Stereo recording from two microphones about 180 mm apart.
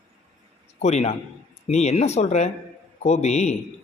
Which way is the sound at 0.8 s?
40° left (ahead or behind).